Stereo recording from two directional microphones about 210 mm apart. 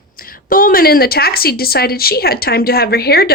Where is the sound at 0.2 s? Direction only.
45° left (ahead or behind).